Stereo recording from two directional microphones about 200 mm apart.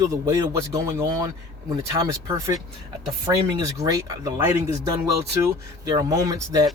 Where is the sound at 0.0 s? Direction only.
15° right (ahead or behind).